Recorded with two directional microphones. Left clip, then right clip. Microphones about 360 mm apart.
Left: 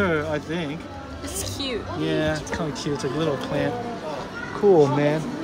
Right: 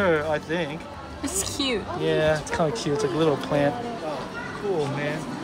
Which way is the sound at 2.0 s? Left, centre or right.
Centre.